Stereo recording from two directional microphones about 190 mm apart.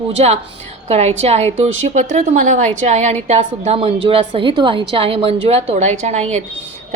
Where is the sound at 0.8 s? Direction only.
35° right (ahead or behind).